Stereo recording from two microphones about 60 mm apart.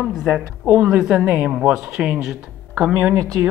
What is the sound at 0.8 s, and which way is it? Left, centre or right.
Speech, centre.